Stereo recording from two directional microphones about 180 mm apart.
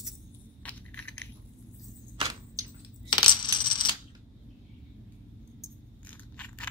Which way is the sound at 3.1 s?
25° left (ahead or behind).